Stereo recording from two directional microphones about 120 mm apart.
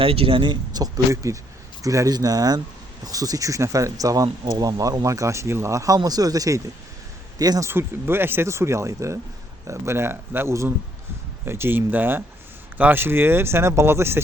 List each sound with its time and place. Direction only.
0.0 s speech: 50° right (ahead or behind); by 7.7 s 30° right (ahead or behind)
7.7 s speech: 20° right (ahead or behind)